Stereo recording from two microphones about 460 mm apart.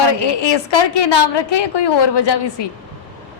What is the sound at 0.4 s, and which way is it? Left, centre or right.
A woman's voice, left.